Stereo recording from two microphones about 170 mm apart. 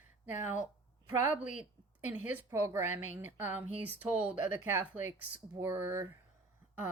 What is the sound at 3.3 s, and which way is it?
Speech, 10° right (ahead or behind).